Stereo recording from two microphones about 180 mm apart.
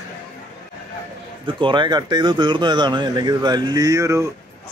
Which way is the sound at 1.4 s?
25° right (ahead or behind).